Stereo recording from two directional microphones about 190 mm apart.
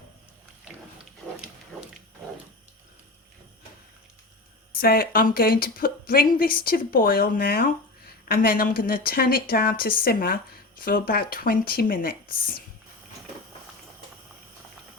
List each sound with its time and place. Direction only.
4.7 s a woman's voice: 50° left (ahead or behind)